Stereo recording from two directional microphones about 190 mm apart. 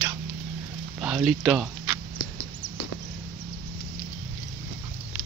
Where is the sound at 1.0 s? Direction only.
5° right (ahead or behind).